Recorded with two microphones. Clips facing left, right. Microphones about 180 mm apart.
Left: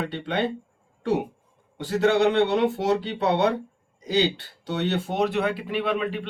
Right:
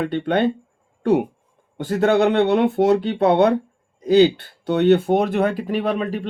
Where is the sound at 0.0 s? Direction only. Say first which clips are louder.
Right 7 dB; 55° right (ahead or behind).